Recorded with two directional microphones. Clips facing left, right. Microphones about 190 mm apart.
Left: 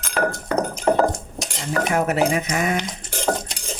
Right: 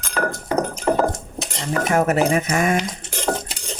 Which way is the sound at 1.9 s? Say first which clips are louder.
Right 3 dB; 45° right (ahead or behind).